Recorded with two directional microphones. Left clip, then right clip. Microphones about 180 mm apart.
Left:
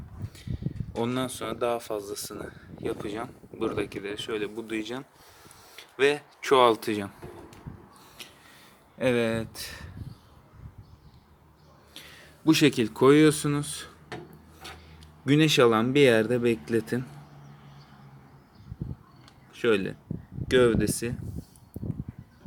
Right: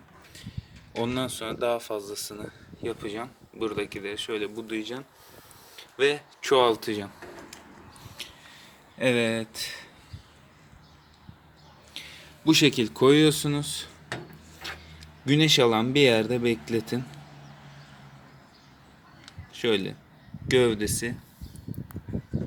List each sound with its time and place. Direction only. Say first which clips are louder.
0.9 s speech: right 1 dB; 5° left (ahead or behind)
4.6 s speech: even; 20° left (ahead or behind)
5.7 s a sound: even; 25° left (ahead or behind)
6.7 s speech: left 2 dB; 30° left (ahead or behind)
8.2 s a sound: right 5 dB; 10° left (ahead or behind)
9.0 s speech: right 1 dB; 5° left (ahead or behind)
11.9 s speech: right 5 dB; 5° left (ahead or behind)
14.6 s a sound: right 6 dB; 10° left (ahead or behind)
15.2 s speech: even; 15° left (ahead or behind)
19.5 s speech: left 1 dB; 10° left (ahead or behind)